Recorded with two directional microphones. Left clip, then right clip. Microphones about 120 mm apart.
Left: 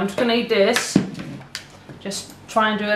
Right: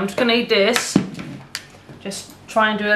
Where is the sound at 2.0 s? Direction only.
10° left (ahead or behind).